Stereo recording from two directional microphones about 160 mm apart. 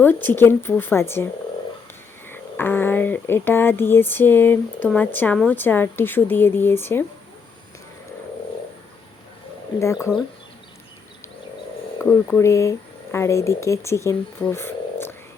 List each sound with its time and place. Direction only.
0.0 s speech: 10° left (ahead or behind)
9.8 s speech: 15° left (ahead or behind)
12.4 s speech: 20° left (ahead or behind)